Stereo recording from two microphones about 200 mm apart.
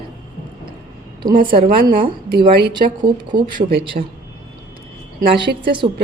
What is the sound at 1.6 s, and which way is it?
Speech, 45° right (ahead or behind).